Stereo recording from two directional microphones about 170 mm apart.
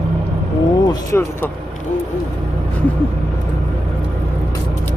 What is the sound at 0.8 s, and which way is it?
Vehicle, 20° left (ahead or behind).